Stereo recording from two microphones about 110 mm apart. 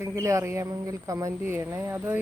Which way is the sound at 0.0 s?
25° right (ahead or behind).